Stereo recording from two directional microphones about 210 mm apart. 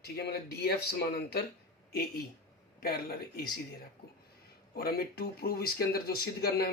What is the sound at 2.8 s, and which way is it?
Speech, 45° left (ahead or behind).